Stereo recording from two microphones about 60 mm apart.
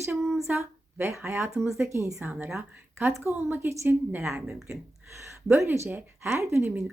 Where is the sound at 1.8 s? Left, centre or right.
Right.